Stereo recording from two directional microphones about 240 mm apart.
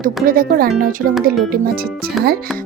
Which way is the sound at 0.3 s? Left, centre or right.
Right.